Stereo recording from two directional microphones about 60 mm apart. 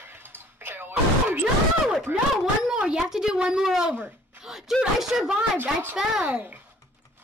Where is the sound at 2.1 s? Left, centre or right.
Right.